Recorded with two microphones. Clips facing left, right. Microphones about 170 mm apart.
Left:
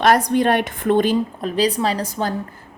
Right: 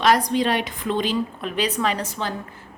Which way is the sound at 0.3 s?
55° left (ahead or behind).